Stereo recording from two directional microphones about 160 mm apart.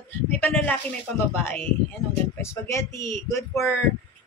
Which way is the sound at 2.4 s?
15° left (ahead or behind).